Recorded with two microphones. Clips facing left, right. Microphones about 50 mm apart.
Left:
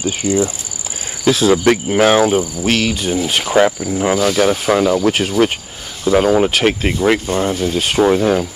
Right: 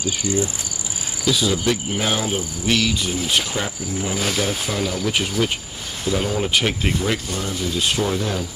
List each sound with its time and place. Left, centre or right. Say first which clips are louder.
0.0 s cricket: left 6 dB; left
1.3 s cricket: left 8 dB; left
3.4 s cricket: left 13 dB; left
4.4 s speech: left 10 dB; left
6.6 s cricket: left 6 dB; left
7.0 s speech: left 9 dB; left
8.0 s cricket: left 10 dB; left